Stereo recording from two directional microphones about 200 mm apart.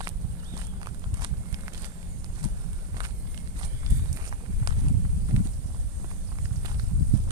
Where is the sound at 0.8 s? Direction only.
20° right (ahead or behind).